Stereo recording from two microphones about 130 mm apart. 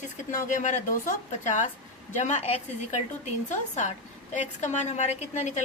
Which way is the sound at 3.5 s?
70° left (ahead or behind).